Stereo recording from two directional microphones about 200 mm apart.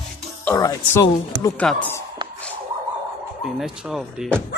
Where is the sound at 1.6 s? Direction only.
5° left (ahead or behind).